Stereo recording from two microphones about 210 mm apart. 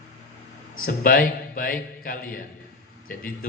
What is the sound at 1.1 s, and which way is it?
A man's voice, 40° left (ahead or behind).